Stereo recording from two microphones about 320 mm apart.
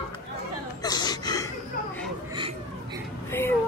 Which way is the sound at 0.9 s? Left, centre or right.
Centre.